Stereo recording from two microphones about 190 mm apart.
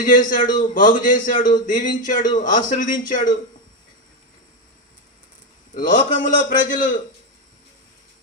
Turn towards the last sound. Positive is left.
turn(degrees=45)  # may be behind; listen again after turning